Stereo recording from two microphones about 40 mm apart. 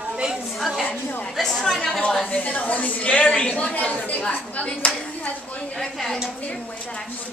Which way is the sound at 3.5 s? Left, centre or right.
Left.